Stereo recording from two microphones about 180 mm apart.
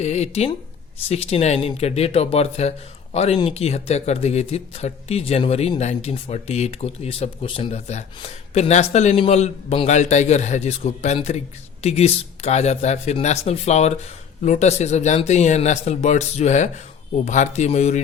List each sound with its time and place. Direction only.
0.0 s speech: 40° left (ahead or behind)